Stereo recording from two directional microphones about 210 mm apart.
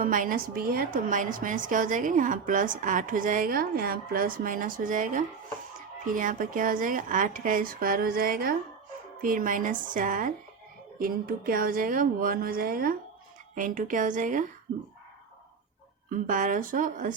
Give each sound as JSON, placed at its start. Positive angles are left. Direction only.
{"t": 0.0, "sound": "a woman's voice", "side_deg": -40}
{"t": 16.0, "sound": "a woman's voice", "side_deg": -40}